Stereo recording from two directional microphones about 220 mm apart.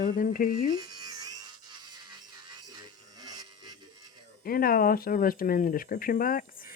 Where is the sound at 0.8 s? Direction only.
15° right (ahead or behind).